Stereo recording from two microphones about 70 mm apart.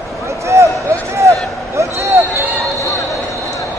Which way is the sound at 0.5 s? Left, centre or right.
Right.